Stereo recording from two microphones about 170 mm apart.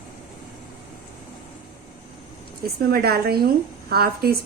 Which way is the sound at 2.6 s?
60° right (ahead or behind).